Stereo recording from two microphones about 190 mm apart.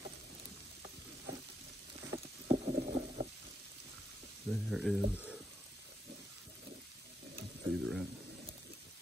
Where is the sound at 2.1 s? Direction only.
35° right (ahead or behind).